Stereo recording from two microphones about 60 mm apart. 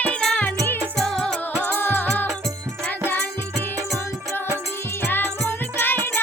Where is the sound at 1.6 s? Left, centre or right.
Left.